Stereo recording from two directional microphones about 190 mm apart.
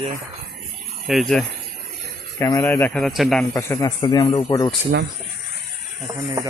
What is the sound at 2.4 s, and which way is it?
Speech, 15° left (ahead or behind).